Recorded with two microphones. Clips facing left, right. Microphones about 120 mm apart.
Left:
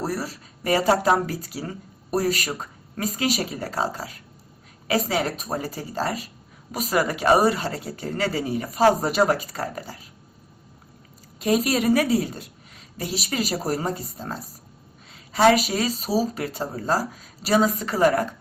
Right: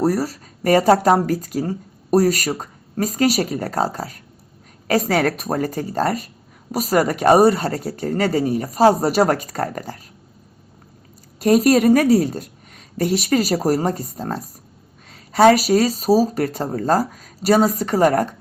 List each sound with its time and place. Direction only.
0.0 s speech: 40° right (ahead or behind)
5.9 s speech: 40° right (ahead or behind)
9.3 s speech: 50° right (ahead or behind)
11.3 s speech: 40° right (ahead or behind)